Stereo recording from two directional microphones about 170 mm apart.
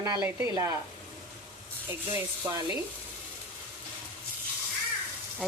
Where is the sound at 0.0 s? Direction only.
20° right (ahead or behind).